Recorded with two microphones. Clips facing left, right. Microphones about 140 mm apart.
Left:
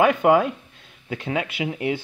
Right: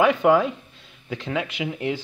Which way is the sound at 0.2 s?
5° left (ahead or behind).